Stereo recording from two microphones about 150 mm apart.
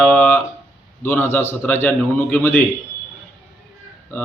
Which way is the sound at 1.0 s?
15° left (ahead or behind).